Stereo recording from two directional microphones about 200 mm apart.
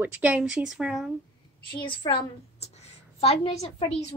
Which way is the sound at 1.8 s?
25° left (ahead or behind).